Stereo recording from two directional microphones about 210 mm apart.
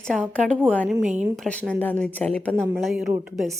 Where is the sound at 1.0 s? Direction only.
35° right (ahead or behind).